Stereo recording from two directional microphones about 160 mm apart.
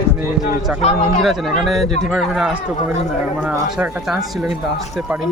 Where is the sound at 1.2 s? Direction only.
Centre (ahead or behind).